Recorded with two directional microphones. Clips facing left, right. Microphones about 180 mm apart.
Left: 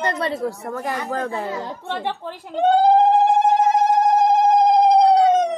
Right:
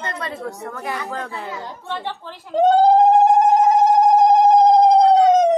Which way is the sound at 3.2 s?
45° right (ahead or behind).